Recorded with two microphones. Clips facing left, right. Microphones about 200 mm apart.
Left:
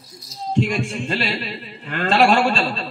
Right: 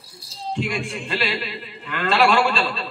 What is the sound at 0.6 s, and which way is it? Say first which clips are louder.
A man's voice: left 6 dB; 45° left (ahead or behind).